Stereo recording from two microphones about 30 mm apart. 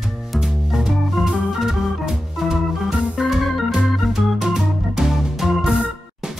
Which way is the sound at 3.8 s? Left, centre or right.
Centre.